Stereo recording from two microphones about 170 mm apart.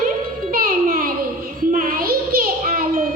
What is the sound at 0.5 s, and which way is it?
Music, 55° right (ahead or behind).